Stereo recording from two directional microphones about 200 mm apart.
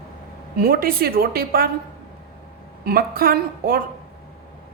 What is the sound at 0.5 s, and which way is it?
A woman's voice, 50° right (ahead or behind).